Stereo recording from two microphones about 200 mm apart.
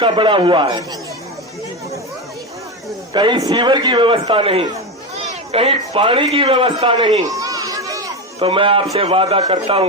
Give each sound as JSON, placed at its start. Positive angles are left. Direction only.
{"t": 0.0, "sound": "a man's voice", "side_deg": -25}
{"t": 3.1, "sound": "a man's voice", "side_deg": -25}